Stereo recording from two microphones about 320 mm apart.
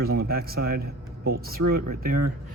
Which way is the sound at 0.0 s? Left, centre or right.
Right.